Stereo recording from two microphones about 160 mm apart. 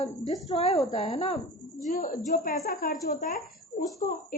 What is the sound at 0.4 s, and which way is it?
Speech, 40° left (ahead or behind).